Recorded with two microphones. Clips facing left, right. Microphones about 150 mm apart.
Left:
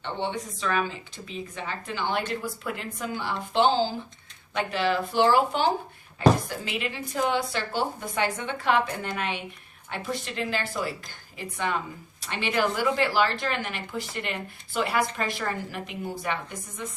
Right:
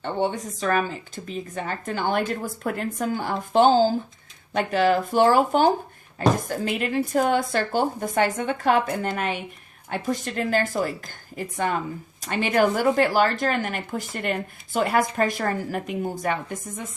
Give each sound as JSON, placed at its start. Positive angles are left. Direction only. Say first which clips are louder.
{"t": 0.0, "sound": "a woman's voice", "louder": "right 5 dB", "side_deg": -45}